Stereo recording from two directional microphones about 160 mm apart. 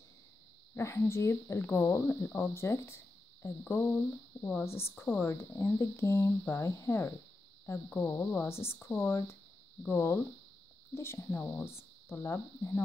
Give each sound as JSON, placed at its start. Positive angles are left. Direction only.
{"t": 0.7, "sound": "speech", "side_deg": 15}